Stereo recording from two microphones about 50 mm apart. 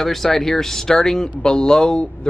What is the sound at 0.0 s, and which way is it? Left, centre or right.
Speech, centre.